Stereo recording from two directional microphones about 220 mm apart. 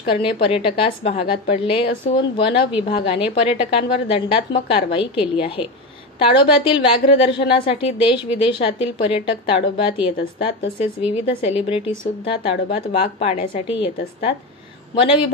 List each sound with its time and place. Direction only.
0.1 s a woman's voice: 25° left (ahead or behind)
15.0 s a woman's voice: 25° left (ahead or behind)